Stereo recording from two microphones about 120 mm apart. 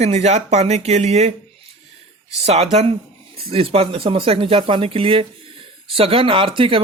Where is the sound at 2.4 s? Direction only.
60° right (ahead or behind).